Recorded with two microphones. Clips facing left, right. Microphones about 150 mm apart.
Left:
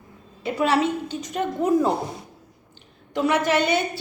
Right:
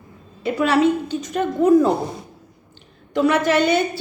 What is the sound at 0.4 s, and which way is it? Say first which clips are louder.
A woman's voice: right 4 dB; 25° left (ahead or behind).